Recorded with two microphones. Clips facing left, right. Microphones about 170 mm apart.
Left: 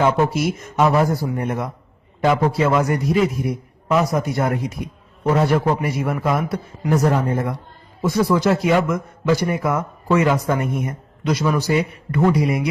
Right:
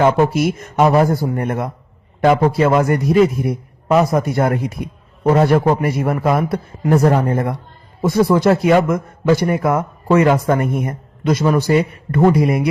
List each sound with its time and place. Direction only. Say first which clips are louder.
0.0 s a man's voice: right 4 dB; 55° right (ahead or behind)